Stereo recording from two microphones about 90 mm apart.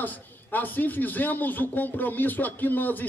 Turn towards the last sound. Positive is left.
turn(degrees=20)  # may be behind; listen again after turning